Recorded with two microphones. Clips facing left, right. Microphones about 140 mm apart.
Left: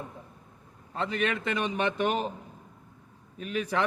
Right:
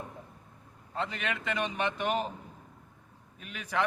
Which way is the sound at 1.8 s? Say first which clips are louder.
Left 5 dB; 35° left (ahead or behind).